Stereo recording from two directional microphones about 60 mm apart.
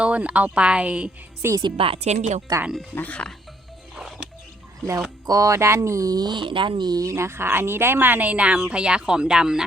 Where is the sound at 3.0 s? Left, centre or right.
Left.